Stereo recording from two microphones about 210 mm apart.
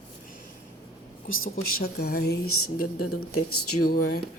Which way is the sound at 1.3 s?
70° left (ahead or behind).